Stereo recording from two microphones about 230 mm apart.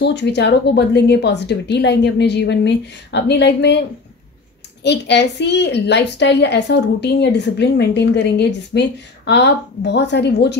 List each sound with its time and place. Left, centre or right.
0.0 s a woman's voice: left
4.8 s a woman's voice: left